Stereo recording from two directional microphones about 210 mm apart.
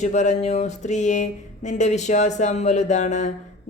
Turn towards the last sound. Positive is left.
turn(degrees=35)  # may be behind; listen again after turning